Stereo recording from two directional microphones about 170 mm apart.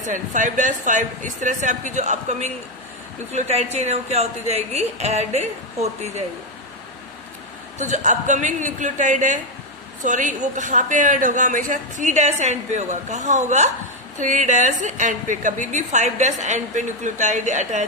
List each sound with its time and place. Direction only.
0.1 s a woman's voice: 50° right (ahead or behind)
7.8 s a woman's voice: 45° right (ahead or behind)